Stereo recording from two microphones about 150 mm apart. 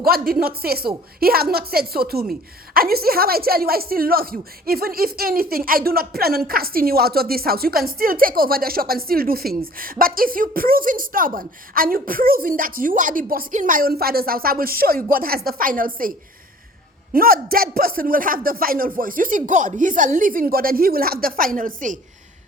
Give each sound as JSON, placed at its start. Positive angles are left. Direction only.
{"t": 0.0, "sound": "a woman's voice", "side_deg": -85}
{"t": 9.7, "sound": "a woman's voice", "side_deg": -70}
{"t": 17.2, "sound": "a woman's voice", "side_deg": -75}